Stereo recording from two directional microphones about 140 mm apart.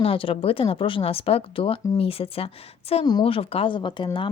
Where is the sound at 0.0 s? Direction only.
40° left (ahead or behind).